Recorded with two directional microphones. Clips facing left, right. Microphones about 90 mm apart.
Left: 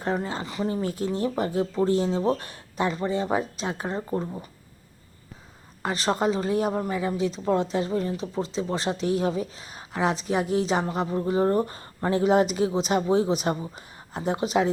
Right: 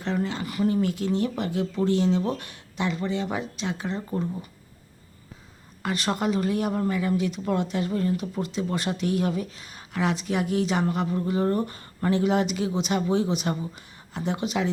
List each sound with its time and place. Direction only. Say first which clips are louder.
0.4 s speech: right 3 dB; 25° left (ahead or behind); by 4.2 s 40° left (ahead or behind)
5.8 s speech: left 2 dB; 30° left (ahead or behind)